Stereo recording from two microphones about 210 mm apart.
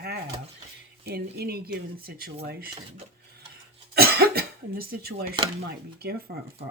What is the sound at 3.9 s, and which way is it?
Cough, 50° right (ahead or behind).